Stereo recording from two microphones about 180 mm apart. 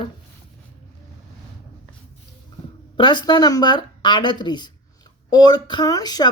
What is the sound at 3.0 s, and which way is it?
Speech, 25° left (ahead or behind).